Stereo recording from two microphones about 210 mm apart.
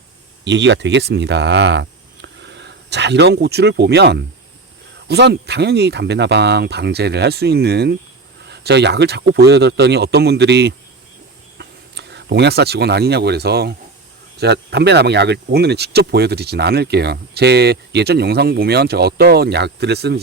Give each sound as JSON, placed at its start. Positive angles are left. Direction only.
{"t": 0.4, "sound": "speech", "side_deg": -55}